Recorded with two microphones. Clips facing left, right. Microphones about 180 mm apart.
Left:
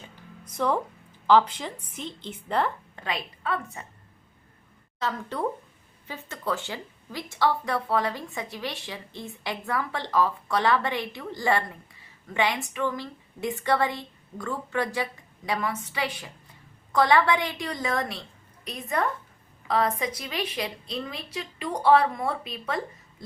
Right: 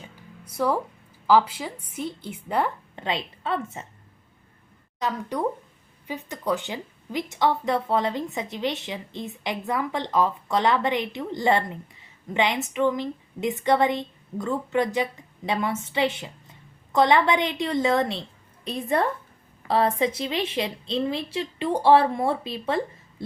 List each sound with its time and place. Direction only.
0.4 s music: 10° right (ahead or behind)
1.3 s a woman's voice: 5° right (ahead or behind)
2.9 s a woman's voice: 25° right (ahead or behind)
4.9 s a woman's voice: 15° right (ahead or behind)